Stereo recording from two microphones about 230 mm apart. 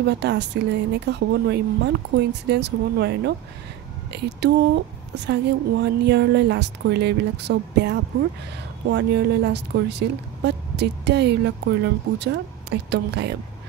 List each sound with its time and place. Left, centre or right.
0.0 s speech: right